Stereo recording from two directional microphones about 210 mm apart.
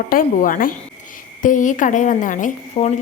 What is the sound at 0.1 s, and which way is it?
A woman's voice, 40° left (ahead or behind).